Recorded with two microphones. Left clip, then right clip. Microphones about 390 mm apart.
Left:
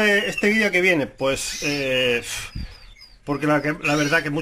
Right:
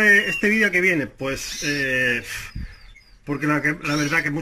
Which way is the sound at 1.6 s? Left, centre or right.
Left.